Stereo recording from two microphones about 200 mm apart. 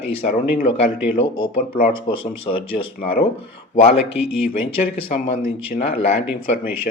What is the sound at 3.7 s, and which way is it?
Speech, 30° left (ahead or behind).